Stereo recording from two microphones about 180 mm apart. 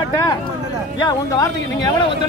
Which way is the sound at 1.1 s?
20° left (ahead or behind).